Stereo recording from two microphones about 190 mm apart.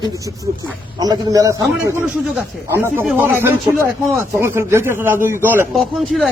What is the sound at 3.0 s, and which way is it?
Speech, 5° right (ahead or behind).